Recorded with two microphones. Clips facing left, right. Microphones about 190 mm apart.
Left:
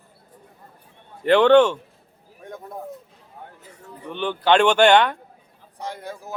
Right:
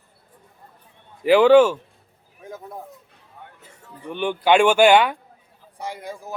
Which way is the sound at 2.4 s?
Centre (ahead or behind).